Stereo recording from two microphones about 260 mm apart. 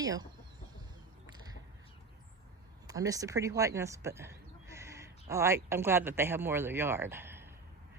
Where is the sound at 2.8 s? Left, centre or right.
Centre.